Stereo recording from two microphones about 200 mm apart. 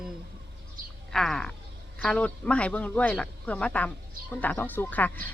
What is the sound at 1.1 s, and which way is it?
A woman's voice, 5° left (ahead or behind).